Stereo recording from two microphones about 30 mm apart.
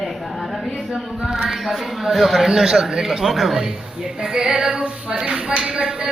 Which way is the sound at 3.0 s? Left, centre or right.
Centre.